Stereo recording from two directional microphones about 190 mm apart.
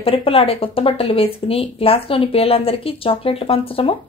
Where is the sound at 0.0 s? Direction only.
30° left (ahead or behind).